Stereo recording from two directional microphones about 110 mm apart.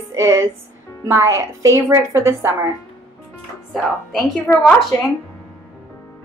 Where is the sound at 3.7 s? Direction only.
Centre (ahead or behind).